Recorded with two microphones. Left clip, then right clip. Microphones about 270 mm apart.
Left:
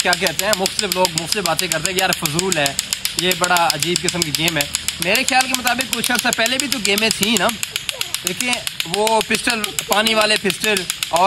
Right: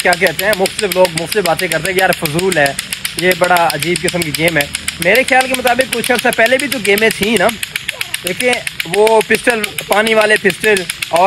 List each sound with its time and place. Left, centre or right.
0.2 s speech: centre
1.5 s speech: centre
3.3 s speech: centre
3.6 s speech: centre
4.6 s speech: centre
8.5 s speech: centre
9.3 s speech: centre